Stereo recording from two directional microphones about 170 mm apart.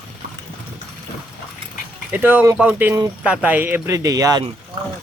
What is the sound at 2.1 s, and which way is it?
Speech, 10° right (ahead or behind).